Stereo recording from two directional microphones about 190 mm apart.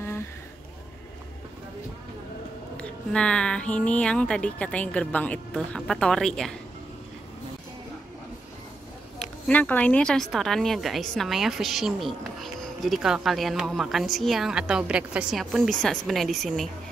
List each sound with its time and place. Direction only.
2.8 s a woman's voice: 5° left (ahead or behind)
9.5 s a woman's voice: 10° left (ahead or behind)